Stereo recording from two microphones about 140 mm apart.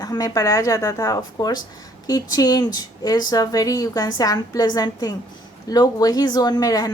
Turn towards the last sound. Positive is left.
turn(degrees=25)  # may be behind; listen again after turning